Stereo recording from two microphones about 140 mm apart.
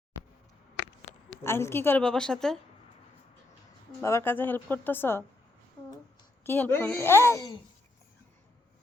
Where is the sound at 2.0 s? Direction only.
5° left (ahead or behind).